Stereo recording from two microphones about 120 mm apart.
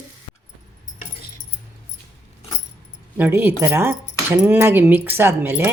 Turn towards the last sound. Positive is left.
turn(degrees=-15)  # may be behind; listen again after turning